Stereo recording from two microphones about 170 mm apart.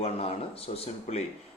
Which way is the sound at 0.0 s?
35° left (ahead or behind).